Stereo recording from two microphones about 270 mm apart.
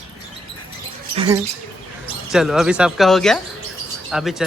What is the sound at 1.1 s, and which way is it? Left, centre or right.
Speech, centre.